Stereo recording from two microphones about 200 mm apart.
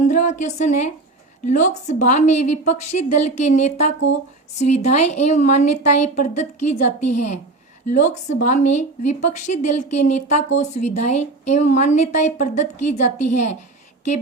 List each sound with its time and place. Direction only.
0.1 s speech: 40° left (ahead or behind)